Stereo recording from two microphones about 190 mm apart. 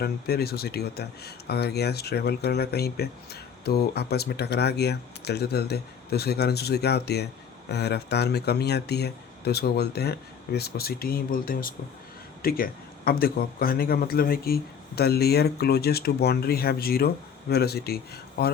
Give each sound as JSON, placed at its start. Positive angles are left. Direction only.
{"t": 0.0, "sound": "speech", "side_deg": 55}